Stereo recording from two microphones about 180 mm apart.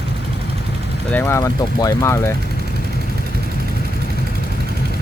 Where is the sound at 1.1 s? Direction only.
15° left (ahead or behind).